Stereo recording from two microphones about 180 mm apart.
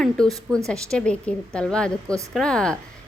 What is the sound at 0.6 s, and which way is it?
A woman's voice, 5° left (ahead or behind).